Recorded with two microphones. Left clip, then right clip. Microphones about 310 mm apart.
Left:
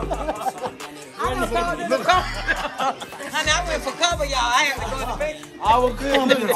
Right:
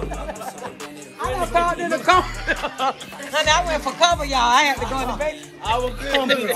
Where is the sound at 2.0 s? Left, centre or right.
Centre.